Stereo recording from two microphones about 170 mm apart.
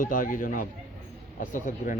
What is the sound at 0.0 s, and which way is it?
Speech, 50° left (ahead or behind).